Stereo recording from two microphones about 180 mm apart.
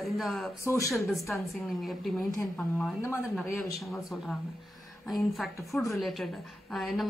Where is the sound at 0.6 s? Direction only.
15° left (ahead or behind).